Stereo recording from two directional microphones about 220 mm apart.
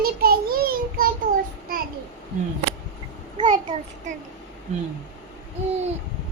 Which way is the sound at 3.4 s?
20° right (ahead or behind).